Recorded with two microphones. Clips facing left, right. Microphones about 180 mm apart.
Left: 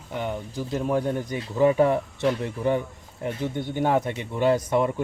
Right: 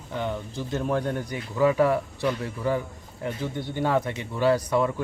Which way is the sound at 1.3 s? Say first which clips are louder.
Left 2 dB; 25° left (ahead or behind).